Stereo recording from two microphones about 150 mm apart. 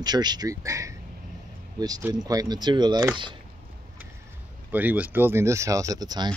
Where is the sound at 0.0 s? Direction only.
30° right (ahead or behind).